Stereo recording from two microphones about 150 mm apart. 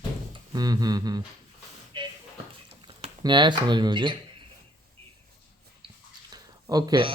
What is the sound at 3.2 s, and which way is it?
Speech, 30° right (ahead or behind).